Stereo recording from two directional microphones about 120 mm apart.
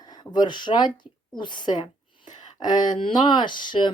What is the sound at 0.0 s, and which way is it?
Speech, 35° left (ahead or behind).